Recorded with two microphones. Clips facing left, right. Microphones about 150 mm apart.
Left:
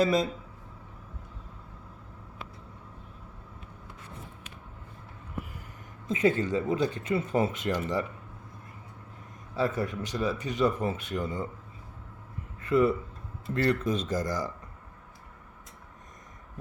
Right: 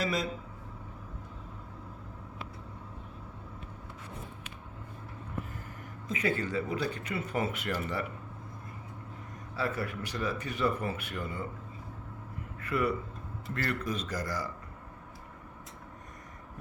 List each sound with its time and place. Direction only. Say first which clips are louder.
0.0 s speech: left 7 dB; 25° left (ahead or behind)
6.1 s speech: left 6 dB; 25° left (ahead or behind)
9.6 s speech: left 5 dB; 20° left (ahead or behind)
12.5 s a sound: left 7 dB; 25° left (ahead or behind)
13.5 s speech: left 7 dB; 25° left (ahead or behind)